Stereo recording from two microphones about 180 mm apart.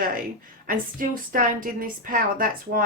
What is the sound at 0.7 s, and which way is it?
A woman's voice, 50° right (ahead or behind).